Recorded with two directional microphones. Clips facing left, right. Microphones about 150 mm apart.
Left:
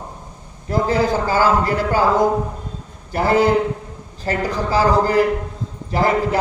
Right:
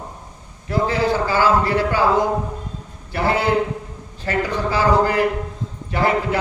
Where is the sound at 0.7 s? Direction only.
45° left (ahead or behind).